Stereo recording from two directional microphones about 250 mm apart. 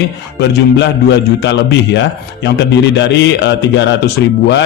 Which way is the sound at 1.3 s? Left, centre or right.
Left.